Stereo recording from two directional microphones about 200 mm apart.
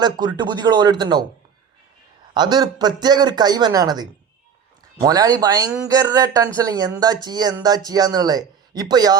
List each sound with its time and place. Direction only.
0.3 s a man's voice: 20° right (ahead or behind)
2.3 s a man's voice: 20° right (ahead or behind)